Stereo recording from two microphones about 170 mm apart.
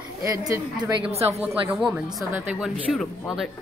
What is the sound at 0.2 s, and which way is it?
Speech, 20° right (ahead or behind).